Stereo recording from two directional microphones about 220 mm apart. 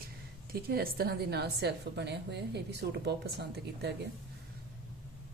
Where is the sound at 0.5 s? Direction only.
45° right (ahead or behind).